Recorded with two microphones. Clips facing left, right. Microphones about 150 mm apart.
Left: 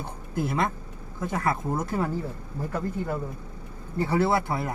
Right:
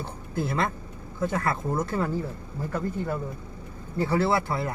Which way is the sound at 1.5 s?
15° left (ahead or behind).